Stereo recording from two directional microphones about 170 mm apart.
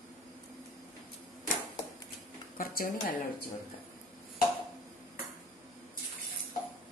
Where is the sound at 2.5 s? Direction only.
55° left (ahead or behind).